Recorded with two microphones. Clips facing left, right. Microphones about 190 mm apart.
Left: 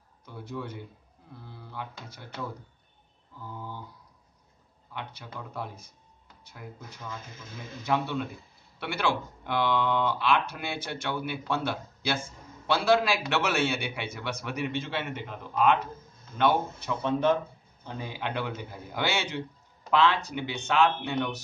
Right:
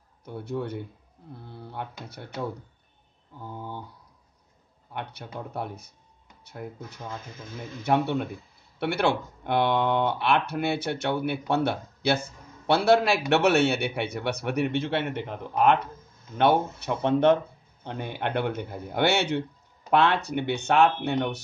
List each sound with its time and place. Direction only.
0.2 s a man's voice: 60° right (ahead or behind)
3.3 s speech: 25° right (ahead or behind)
4.9 s a man's voice: 60° right (ahead or behind)
7.8 s a man's voice: 55° right (ahead or behind)